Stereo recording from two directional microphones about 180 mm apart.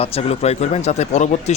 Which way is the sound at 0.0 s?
35° left (ahead or behind).